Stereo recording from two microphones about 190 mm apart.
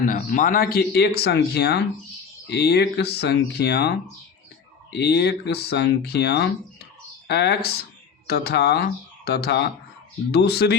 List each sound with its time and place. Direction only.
0.0 s speech: 45° left (ahead or behind)